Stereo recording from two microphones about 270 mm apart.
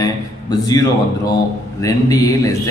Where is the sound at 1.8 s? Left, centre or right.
Centre.